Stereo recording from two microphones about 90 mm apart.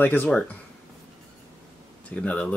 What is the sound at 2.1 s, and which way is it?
Speech, 15° left (ahead or behind).